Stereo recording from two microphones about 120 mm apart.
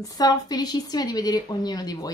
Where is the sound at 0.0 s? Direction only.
35° left (ahead or behind).